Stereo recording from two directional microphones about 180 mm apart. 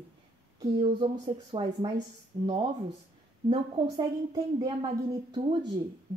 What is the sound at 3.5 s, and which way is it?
A woman's voice, 25° right (ahead or behind).